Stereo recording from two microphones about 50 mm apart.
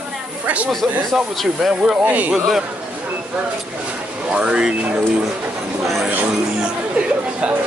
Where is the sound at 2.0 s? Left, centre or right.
Right.